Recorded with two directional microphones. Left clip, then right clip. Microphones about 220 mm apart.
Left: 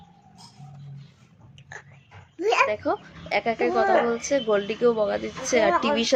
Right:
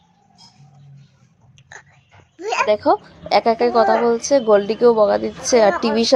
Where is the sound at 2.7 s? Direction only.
20° right (ahead or behind).